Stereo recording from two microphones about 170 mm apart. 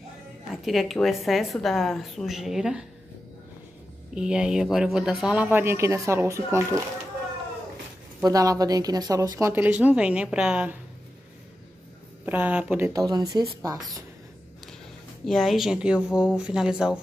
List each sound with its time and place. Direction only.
0.7 s a woman's voice: centre (ahead or behind)
4.1 s speech: 5° right (ahead or behind)
8.2 s speech: 20° right (ahead or behind)
12.3 s speech: 10° right (ahead or behind)
15.2 s a woman's voice: centre (ahead or behind)